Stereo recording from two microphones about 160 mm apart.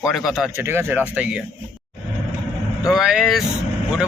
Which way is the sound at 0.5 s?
15° right (ahead or behind).